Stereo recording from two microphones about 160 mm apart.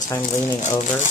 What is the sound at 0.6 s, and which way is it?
Speech, 50° left (ahead or behind).